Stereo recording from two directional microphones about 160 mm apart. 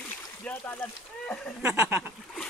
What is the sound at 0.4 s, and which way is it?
Speech, 10° left (ahead or behind).